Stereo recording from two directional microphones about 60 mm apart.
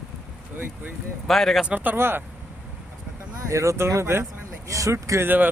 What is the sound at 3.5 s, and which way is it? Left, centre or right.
Speech, right.